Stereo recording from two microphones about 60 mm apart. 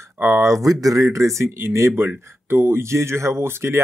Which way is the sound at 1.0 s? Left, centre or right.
Right.